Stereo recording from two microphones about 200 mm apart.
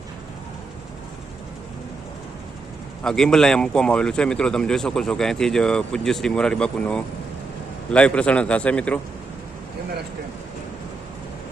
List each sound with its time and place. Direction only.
3.0 s a man's voice: 5° left (ahead or behind)